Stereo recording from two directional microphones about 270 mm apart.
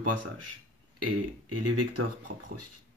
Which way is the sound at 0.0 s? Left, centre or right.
Right.